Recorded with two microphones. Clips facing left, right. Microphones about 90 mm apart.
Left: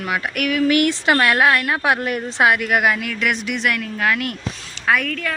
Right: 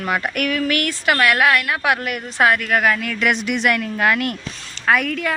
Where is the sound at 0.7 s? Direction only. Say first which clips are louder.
Left 4 dB; 20° left (ahead or behind).